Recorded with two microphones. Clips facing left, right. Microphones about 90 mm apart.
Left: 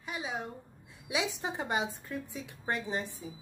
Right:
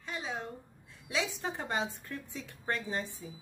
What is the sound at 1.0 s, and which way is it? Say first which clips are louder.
A woman's voice: left 1 dB; 15° left (ahead or behind).